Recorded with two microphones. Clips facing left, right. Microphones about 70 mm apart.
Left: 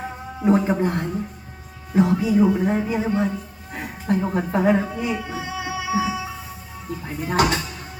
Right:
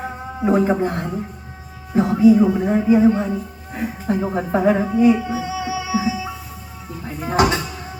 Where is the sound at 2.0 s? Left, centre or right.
Centre.